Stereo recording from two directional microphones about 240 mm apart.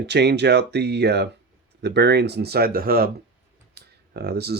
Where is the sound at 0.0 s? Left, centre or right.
Right.